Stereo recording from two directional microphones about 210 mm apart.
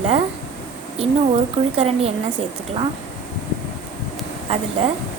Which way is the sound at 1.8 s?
30° right (ahead or behind).